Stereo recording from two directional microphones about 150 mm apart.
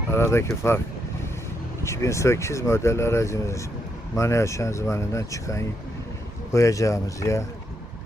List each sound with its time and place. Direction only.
0.1 s speech: 15° left (ahead or behind)
1.8 s speech: 20° left (ahead or behind)